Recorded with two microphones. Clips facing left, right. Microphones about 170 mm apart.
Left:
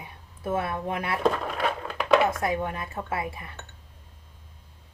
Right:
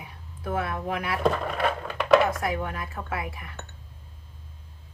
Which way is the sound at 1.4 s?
Centre (ahead or behind).